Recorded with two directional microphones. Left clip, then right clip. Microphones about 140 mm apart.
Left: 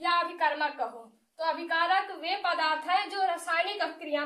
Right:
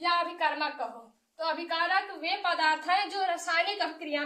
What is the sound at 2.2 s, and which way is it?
A woman's voice, 30° left (ahead or behind).